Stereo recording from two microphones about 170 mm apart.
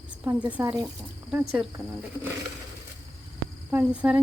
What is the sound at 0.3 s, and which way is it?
Speech, 10° right (ahead or behind).